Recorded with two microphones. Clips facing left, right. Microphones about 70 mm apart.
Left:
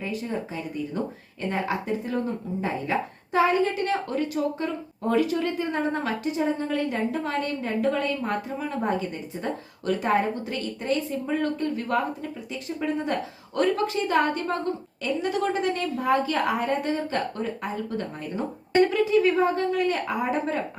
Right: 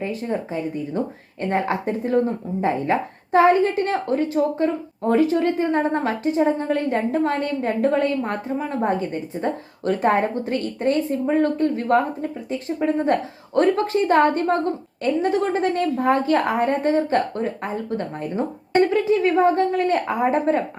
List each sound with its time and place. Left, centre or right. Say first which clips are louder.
0.0 s speech: right 5 dB; right